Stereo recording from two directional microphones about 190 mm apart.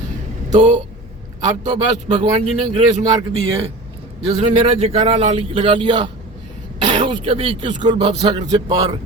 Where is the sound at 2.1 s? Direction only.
25° right (ahead or behind).